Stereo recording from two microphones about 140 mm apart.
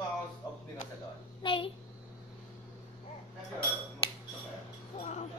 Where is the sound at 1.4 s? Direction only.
40° left (ahead or behind).